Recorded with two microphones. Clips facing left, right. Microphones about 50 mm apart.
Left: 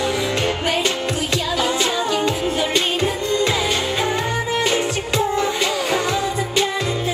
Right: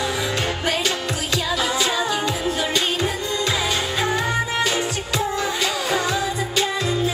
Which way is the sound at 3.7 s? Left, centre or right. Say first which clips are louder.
Left 1 dB; left.